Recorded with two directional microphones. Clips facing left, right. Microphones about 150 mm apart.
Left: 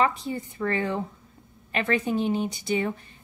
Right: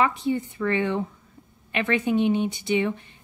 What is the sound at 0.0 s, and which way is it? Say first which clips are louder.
A woman's voice: right 2 dB; 35° left (ahead or behind).